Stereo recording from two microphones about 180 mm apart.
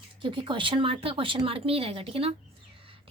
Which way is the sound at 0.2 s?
30° right (ahead or behind).